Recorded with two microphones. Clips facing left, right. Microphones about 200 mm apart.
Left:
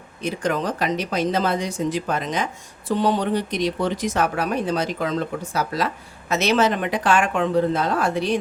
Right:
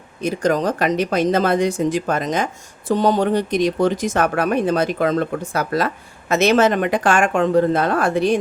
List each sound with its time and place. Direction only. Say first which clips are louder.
0.2 s speech: right 5 dB; 40° right (ahead or behind)
0.9 s speech: right 6 dB; 55° right (ahead or behind)